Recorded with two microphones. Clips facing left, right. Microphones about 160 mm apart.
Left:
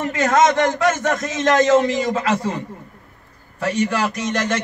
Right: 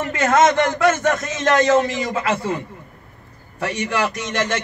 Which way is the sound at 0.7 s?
40° left (ahead or behind).